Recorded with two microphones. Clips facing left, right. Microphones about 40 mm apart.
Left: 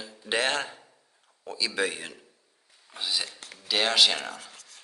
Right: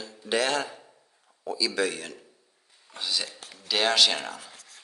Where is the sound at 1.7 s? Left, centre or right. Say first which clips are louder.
Right 1 dB; left.